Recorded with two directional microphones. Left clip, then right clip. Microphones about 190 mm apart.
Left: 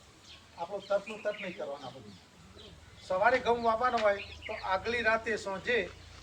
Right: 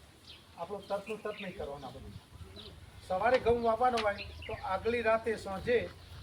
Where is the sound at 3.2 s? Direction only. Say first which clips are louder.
Left 1 dB; 15° right (ahead or behind).